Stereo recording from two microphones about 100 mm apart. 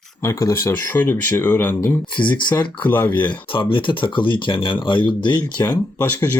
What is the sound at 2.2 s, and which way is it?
Speech, 15° left (ahead or behind).